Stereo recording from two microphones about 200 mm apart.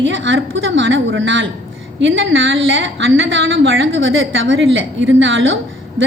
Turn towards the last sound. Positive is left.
turn(degrees=-75)  # may be behind; listen again after turning